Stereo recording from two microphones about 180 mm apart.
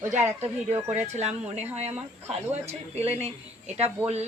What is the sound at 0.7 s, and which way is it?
Speech, 10° right (ahead or behind).